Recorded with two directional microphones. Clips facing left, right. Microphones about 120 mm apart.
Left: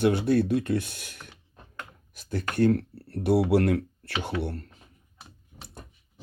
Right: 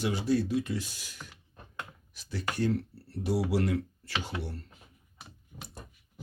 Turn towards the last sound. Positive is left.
turn(degrees=60)  # may be behind; listen again after turning